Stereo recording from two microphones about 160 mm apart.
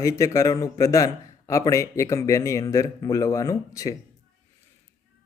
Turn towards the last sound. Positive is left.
turn(degrees=20)  # may be behind; listen again after turning